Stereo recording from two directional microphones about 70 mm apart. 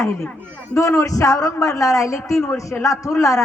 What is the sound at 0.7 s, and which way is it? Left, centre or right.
A woman's voice, left.